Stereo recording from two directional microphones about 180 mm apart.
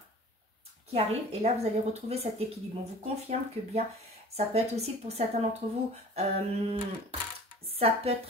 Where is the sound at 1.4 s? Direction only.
35° right (ahead or behind).